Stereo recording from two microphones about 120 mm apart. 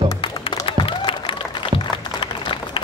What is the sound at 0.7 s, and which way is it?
Applause, 45° left (ahead or behind).